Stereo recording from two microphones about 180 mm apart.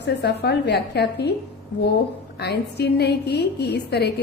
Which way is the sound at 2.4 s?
65° left (ahead or behind).